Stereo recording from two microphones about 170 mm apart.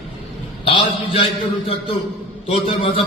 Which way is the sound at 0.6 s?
35° left (ahead or behind).